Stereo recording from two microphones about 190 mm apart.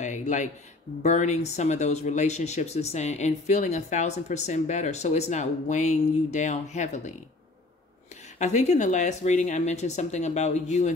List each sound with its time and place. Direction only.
0.0 s a sound: 40° left (ahead or behind)
1.0 s speech: 35° left (ahead or behind)
8.4 s speech: 40° left (ahead or behind)